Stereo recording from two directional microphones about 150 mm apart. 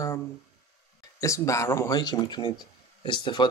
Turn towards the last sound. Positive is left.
turn(degrees=30)  # may be behind; listen again after turning